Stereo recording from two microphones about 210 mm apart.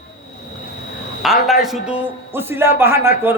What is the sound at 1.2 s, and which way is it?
A man's voice, centre (ahead or behind).